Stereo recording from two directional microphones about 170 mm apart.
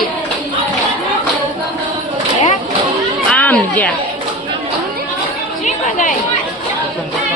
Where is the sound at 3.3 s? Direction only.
10° left (ahead or behind).